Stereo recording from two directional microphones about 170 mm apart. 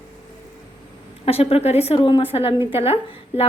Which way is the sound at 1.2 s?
35° left (ahead or behind).